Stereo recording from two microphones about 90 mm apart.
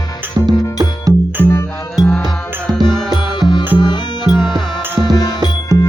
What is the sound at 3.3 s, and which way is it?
Music, 50° left (ahead or behind).